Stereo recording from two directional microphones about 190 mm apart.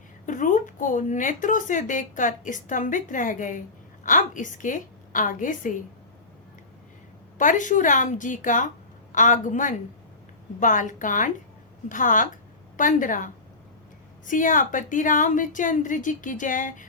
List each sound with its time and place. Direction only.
0.3 s a woman's voice: 45° left (ahead or behind)
7.3 s speech: 40° left (ahead or behind)